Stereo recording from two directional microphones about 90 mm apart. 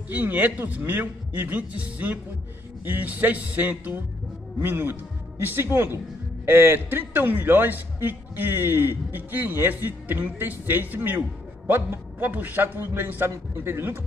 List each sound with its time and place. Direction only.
0.1 s a man's voice: 20° right (ahead or behind)